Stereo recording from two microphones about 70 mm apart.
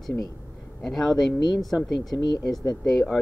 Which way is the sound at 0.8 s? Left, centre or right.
Centre.